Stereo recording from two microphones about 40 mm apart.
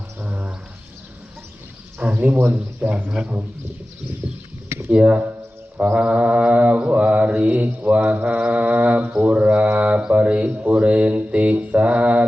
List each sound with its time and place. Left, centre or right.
0.2 s a sound: right
2.0 s a sound: right
2.8 s mantra: right
3.2 s speech: centre
4.9 s mantra: right
8.1 s mantra: right
8.4 s mantra: right